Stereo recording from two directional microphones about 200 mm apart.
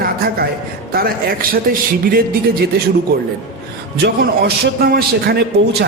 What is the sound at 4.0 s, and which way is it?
A man's voice, 55° right (ahead or behind).